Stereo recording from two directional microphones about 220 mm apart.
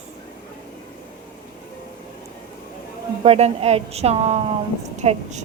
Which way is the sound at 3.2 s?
30° right (ahead or behind).